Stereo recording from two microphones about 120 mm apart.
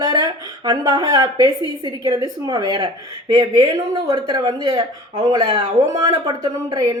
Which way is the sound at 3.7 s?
25° right (ahead or behind).